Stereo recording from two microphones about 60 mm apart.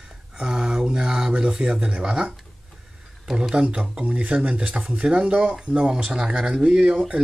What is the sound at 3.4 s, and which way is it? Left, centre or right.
Speech, centre.